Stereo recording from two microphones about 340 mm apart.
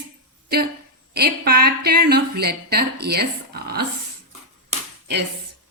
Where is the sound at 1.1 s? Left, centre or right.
Right.